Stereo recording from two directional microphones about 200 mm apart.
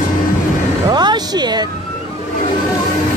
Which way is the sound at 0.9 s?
20° right (ahead or behind).